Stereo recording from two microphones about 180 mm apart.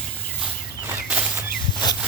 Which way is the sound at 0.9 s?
10° right (ahead or behind).